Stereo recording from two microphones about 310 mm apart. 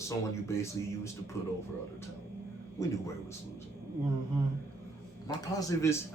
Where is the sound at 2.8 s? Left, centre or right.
Centre.